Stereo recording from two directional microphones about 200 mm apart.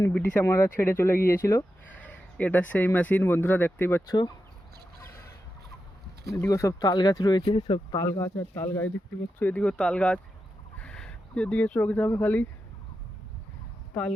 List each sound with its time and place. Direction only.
0.0 s speech: 10° left (ahead or behind)
6.3 s speech: 15° left (ahead or behind)
7.9 s speech: 10° left (ahead or behind)